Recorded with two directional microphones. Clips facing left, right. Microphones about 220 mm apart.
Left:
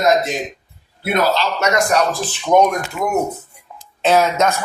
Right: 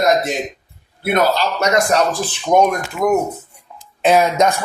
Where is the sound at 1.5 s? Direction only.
30° right (ahead or behind).